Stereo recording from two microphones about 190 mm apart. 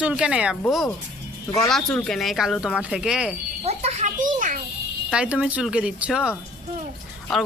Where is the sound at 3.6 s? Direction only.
35° right (ahead or behind).